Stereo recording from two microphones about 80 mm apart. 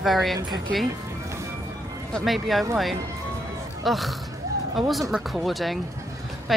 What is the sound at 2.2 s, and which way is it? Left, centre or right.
Speech, centre.